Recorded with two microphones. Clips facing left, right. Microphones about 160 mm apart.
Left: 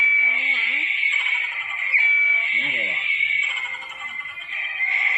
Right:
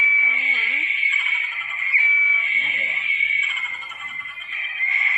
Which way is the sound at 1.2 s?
75° left (ahead or behind).